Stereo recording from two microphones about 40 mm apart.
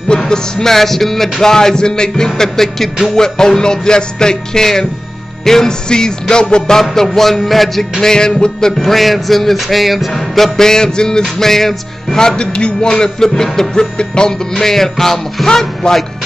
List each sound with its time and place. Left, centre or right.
0.3 s music: centre
0.7 s music: centre
6.8 s music: centre
8.0 s music: centre